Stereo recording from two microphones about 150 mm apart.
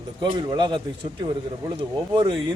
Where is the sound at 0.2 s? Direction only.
30° right (ahead or behind).